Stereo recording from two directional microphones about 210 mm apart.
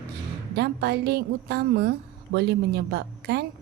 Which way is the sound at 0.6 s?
50° right (ahead or behind).